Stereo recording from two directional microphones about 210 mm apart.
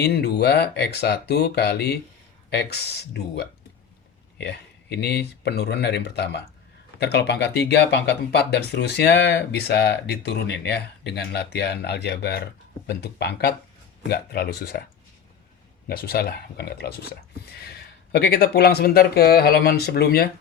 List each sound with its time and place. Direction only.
0.0 s speech: 50° left (ahead or behind)
15.9 s speech: 45° left (ahead or behind)